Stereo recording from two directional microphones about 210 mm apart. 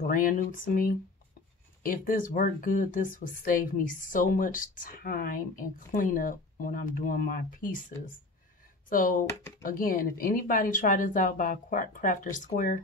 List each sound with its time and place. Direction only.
0.0 s a woman's voice: 40° left (ahead or behind)
8.8 s a woman's voice: 40° left (ahead or behind)